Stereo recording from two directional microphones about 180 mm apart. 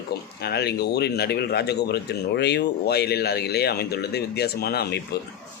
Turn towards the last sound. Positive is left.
turn(degrees=60)  # may be behind; listen again after turning